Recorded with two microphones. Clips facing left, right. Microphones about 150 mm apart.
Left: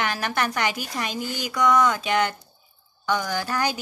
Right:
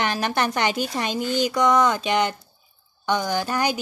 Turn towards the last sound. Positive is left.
turn(degrees=-20)  # may be behind; listen again after turning